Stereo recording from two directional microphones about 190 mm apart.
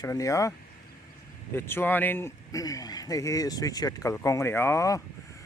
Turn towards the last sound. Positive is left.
turn(degrees=15)  # may be behind; listen again after turning